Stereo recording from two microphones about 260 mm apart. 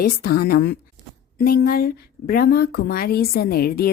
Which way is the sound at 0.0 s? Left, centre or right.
Left.